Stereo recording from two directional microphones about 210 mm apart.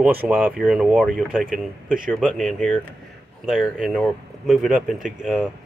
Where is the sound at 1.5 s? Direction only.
40° right (ahead or behind).